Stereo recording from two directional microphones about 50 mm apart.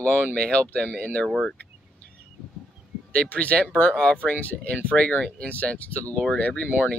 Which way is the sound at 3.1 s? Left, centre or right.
Left.